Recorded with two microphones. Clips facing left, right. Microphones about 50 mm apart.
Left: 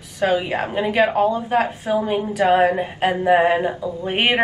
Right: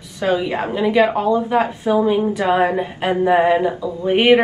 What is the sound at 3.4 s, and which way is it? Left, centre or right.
Speech, left.